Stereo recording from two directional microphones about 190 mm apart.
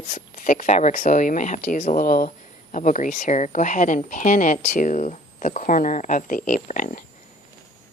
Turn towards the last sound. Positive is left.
turn(degrees=45)  # may be behind; listen again after turning